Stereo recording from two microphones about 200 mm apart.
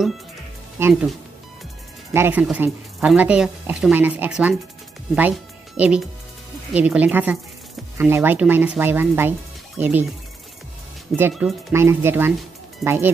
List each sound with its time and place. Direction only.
0.7 s speech: 10° right (ahead or behind)
2.1 s speech: 10° right (ahead or behind)
11.1 s speech: 10° right (ahead or behind)